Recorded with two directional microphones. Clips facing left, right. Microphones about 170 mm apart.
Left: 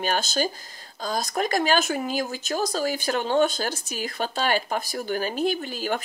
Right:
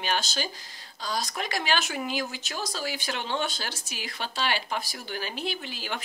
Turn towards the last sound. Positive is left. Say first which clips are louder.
# left 8 dB
turn(degrees=45)  # may be behind; listen again after turning